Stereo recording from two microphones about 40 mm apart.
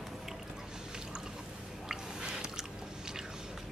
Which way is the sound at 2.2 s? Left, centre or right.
Centre.